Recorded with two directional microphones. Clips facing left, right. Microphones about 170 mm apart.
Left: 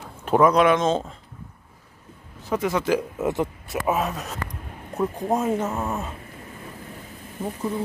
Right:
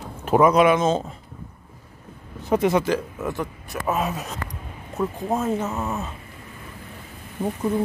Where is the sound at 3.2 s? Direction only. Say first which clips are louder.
Left 4 dB; 20° left (ahead or behind).